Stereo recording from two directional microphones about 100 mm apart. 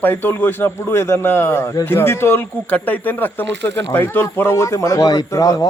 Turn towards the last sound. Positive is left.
turn(degrees=35)  # may be behind; listen again after turning